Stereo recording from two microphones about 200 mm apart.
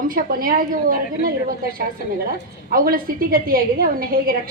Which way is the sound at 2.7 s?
45° right (ahead or behind).